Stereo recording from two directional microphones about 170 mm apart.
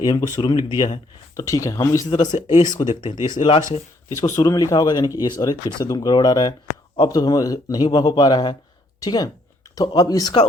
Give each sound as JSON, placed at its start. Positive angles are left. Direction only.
{"t": 0.0, "sound": "speech", "side_deg": 25}